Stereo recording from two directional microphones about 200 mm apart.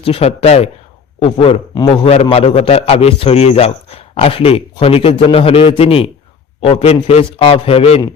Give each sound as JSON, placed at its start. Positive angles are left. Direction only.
{"t": 0.0, "sound": "a man's voice", "side_deg": 30}